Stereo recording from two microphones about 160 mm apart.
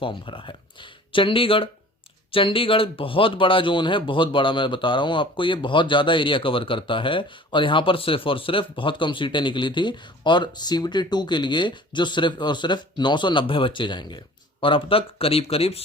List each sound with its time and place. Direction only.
0.0 s speech: 30° left (ahead or behind)